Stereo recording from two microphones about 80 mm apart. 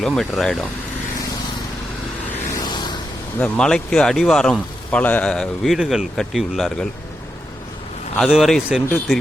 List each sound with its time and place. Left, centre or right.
0.0 s speech: centre
2.6 s a sound: left
3.4 s speech: centre
4.9 s speech: centre
5.7 s speech: centre
6.1 s speech: centre
8.2 s speech: centre